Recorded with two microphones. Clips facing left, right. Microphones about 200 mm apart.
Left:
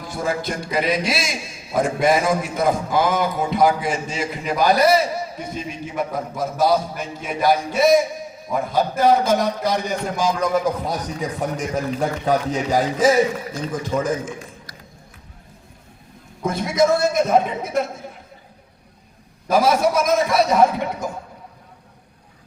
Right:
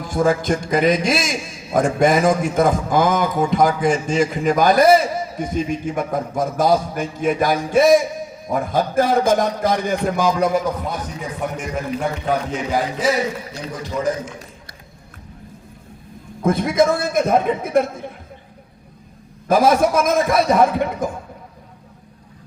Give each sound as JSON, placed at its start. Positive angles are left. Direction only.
{"t": 0.0, "sound": "a man's voice", "side_deg": -50}
{"t": 10.8, "sound": "a man's voice", "side_deg": 40}
{"t": 16.4, "sound": "a man's voice", "side_deg": -55}
{"t": 19.5, "sound": "a man's voice", "side_deg": -50}